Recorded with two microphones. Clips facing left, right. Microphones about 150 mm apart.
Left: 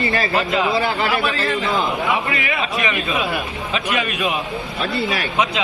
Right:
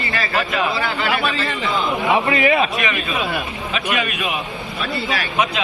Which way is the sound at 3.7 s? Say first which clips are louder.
Even; 30° left (ahead or behind).